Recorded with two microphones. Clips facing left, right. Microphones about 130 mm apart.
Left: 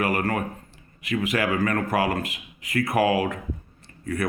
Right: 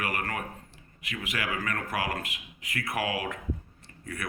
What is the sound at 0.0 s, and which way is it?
Speech, 35° left (ahead or behind).